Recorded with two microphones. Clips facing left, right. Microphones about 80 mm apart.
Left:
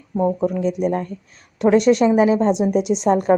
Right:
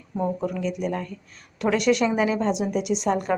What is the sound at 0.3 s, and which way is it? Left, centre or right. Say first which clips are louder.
A woman's voice: left 7 dB; left.